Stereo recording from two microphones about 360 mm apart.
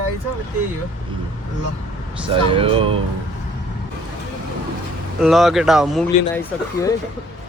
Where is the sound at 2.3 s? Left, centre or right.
Centre.